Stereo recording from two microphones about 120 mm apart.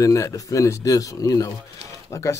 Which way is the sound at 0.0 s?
25° left (ahead or behind).